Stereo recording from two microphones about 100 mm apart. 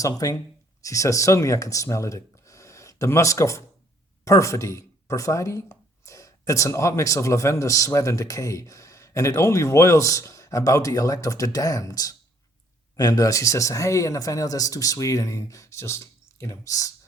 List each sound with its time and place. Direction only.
0.0 s speech: 35° left (ahead or behind)